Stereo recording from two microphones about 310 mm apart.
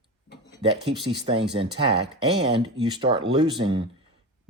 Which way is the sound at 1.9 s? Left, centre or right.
Right.